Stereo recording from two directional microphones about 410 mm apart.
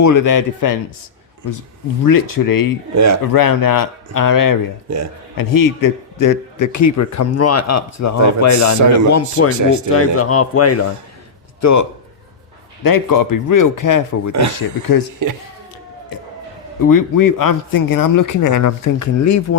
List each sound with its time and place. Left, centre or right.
0.0 s speech: left
2.0 s speech: left
2.9 s speech: right
3.3 s speech: left
4.9 s speech: right
5.4 s a man's voice: left
9.6 s speech: right
9.9 s a man's voice: left
15.2 s speech: right
16.9 s speech: left